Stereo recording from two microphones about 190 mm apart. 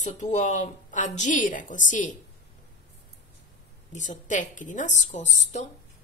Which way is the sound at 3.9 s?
40° left (ahead or behind).